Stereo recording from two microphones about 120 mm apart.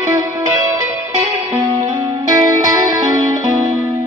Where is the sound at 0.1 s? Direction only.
25° right (ahead or behind).